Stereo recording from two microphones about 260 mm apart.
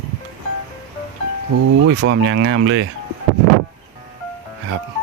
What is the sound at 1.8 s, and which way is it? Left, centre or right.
Speech, right.